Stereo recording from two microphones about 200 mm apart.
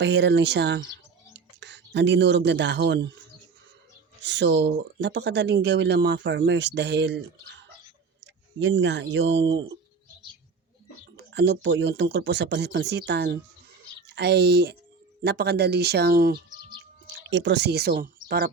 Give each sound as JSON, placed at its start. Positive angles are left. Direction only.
{"t": 0.0, "sound": "speech", "side_deg": -60}
{"t": 4.2, "sound": "speech", "side_deg": -60}
{"t": 11.3, "sound": "speech", "side_deg": -60}
{"t": 17.1, "sound": "speech", "side_deg": -65}